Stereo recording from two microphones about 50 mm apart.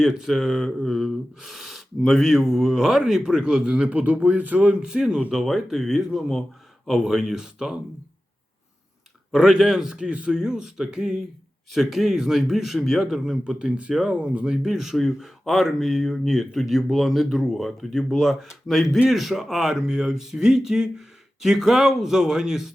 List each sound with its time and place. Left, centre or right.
0.0 s speech: centre
3.8 s a man's voice: right; by 7.8 s centre
9.3 s speech: centre
11.7 s speech: centre
13.4 s a man's voice: centre
14.4 s speech: centre